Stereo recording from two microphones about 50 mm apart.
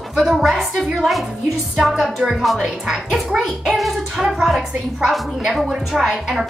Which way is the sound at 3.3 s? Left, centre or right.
Centre.